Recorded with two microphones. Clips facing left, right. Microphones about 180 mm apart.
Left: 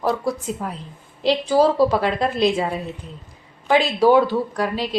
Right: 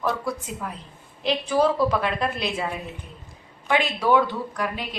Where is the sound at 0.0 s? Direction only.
35° left (ahead or behind).